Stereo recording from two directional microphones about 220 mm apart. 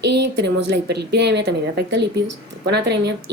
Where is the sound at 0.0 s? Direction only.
50° right (ahead or behind).